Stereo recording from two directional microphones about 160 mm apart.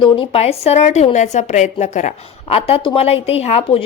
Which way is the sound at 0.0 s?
35° left (ahead or behind).